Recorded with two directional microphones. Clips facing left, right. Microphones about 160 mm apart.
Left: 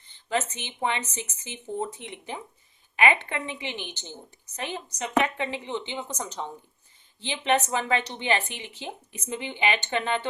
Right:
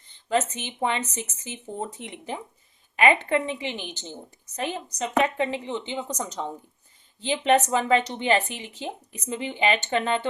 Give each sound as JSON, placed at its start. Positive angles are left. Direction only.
{"t": 0.3, "sound": "speech", "side_deg": -45}